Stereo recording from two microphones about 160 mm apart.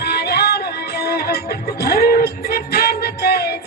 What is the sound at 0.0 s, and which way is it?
Music, 90° left.